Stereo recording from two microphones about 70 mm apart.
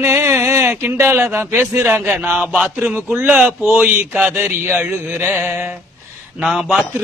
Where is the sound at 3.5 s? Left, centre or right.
Right.